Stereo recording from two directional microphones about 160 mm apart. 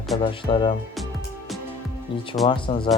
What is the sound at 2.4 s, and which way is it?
Speech, 30° left (ahead or behind).